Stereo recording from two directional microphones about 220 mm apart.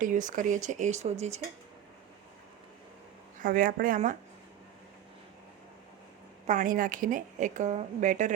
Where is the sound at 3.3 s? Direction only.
40° right (ahead or behind).